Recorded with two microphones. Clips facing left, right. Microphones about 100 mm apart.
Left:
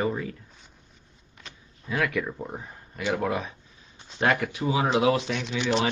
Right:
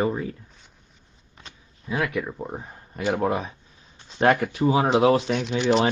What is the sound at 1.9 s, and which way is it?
Speech, 20° right (ahead or behind).